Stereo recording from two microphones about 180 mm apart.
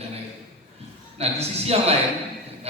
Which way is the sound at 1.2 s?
35° right (ahead or behind).